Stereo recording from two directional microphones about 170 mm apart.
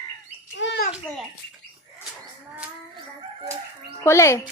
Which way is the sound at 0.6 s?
90° left.